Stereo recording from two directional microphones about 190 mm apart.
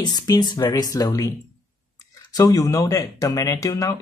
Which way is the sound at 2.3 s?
20° left (ahead or behind).